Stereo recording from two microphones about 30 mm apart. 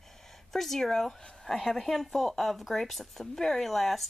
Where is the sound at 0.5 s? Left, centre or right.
Centre.